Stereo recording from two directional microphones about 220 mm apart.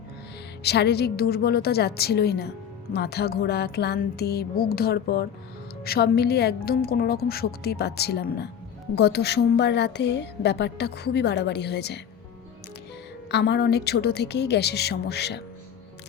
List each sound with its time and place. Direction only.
0.6 s speech: 50° left (ahead or behind)
13.3 s speech: 50° left (ahead or behind)